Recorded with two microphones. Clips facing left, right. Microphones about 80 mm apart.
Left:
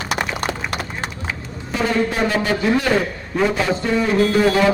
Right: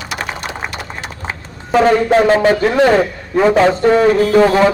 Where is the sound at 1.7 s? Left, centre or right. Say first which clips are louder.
Right 9 dB; right.